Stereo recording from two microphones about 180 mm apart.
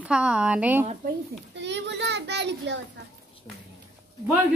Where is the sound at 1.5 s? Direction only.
75° right (ahead or behind).